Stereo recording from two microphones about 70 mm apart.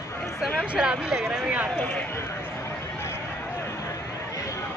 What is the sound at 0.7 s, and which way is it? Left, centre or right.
Speech, centre.